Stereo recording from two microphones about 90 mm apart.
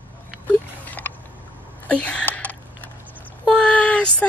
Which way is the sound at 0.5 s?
20° left (ahead or behind).